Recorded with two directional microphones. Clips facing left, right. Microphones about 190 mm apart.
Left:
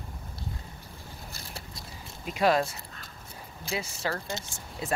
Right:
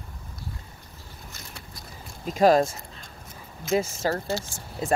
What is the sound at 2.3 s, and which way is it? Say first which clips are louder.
Speech: right 6 dB; 40° right (ahead or behind).